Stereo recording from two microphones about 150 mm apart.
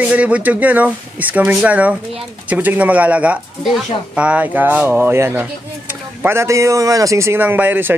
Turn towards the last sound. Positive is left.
turn(degrees=-10)  # may be behind; listen again after turning